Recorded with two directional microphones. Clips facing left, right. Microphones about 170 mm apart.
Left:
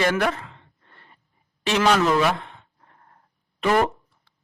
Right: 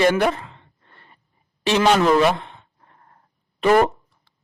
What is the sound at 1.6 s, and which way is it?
Speech, 30° right (ahead or behind).